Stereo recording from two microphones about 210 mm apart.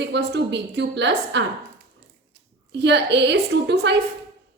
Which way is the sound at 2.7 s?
55° right (ahead or behind).